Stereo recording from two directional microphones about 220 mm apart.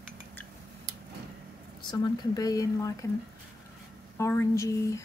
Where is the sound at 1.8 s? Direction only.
20° left (ahead or behind).